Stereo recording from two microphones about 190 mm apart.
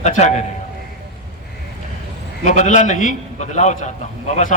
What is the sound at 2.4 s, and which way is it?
A man's voice, 40° left (ahead or behind).